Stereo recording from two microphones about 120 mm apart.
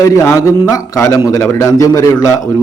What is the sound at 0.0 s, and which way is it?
A man's voice, 25° left (ahead or behind).